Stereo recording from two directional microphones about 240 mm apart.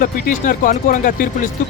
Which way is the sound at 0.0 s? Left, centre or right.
Left.